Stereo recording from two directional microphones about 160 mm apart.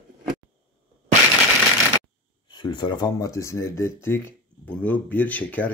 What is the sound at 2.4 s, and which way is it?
Speech, 30° left (ahead or behind).